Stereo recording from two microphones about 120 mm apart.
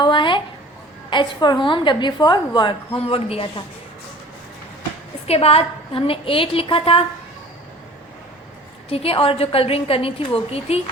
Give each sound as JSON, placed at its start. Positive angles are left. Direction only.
{"t": 0.0, "sound": "a sound", "side_deg": 45}
{"t": 1.1, "sound": "a woman's voice", "side_deg": 40}
{"t": 5.3, "sound": "a woman's voice", "side_deg": 55}
{"t": 8.9, "sound": "a woman's voice", "side_deg": 50}